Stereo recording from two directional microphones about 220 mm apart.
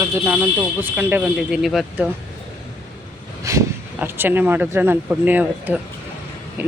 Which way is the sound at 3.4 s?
10° right (ahead or behind).